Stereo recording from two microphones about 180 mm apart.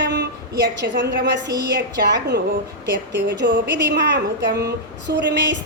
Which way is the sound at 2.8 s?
75° right (ahead or behind).